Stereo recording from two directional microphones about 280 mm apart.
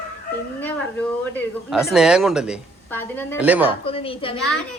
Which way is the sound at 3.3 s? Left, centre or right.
Centre.